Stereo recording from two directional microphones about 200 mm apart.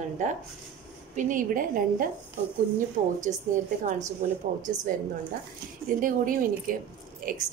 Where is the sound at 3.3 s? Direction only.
40° right (ahead or behind).